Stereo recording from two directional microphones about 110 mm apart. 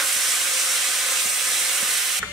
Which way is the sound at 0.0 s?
Centre (ahead or behind).